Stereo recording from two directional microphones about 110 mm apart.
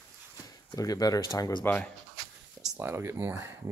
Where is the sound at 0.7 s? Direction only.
35° left (ahead or behind).